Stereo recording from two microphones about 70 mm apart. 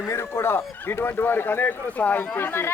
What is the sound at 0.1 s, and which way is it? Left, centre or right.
Speech, left.